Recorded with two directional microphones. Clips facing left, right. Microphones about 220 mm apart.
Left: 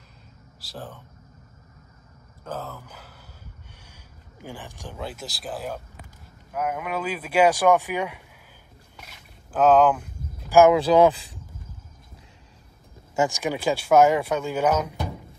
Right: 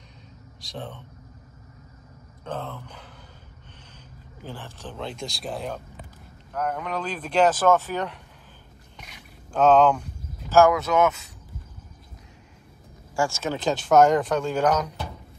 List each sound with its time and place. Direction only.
0.6 s speech: 5° left (ahead or behind)
2.4 s speech: 5° left (ahead or behind)
4.4 s speech: 15° left (ahead or behind)
8.9 s a sound: 5° left (ahead or behind)
10.5 s speech: 20° left (ahead or behind)
10.8 s speech: 30° left (ahead or behind)
13.1 s speech: 20° left (ahead or behind)